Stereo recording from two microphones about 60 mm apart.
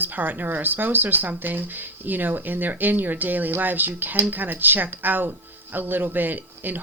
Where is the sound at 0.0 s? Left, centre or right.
Right.